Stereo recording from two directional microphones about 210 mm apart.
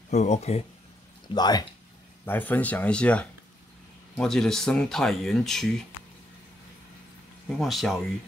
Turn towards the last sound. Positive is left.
turn(degrees=0)  # may be behind; listen again after turning